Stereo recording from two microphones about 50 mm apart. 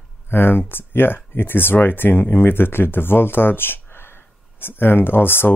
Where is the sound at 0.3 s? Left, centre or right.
Left.